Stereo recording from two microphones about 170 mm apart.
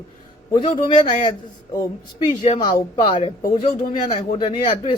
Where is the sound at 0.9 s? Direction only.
45° left (ahead or behind).